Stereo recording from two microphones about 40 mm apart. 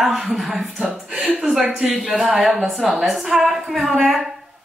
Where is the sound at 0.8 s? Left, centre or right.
Right; by 4.3 s centre.